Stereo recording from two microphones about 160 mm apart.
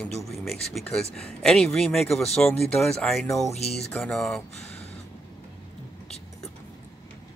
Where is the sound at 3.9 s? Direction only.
5° left (ahead or behind).